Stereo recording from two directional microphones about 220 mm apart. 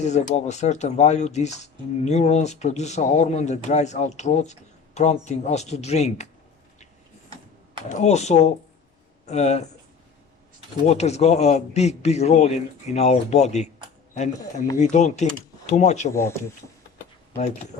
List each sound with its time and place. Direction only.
0.0 s speech: 30° left (ahead or behind)
7.9 s speech: 30° left (ahead or behind)
10.8 s a man's voice: 30° left (ahead or behind)
14.8 s speech: 30° left (ahead or behind)